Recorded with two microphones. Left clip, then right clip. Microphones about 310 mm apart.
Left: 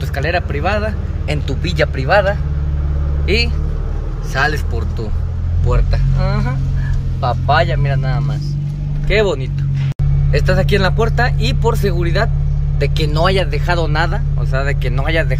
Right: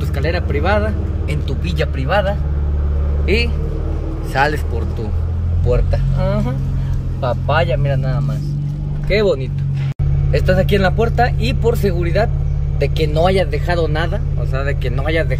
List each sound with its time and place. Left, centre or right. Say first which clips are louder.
0.2 s speech: left 2 dB; centre
1.5 s speech: left 6 dB; centre
3.3 s speech: left 1 dB; centre
7.2 s speech: left 3 dB; left
9.1 s speech: even; centre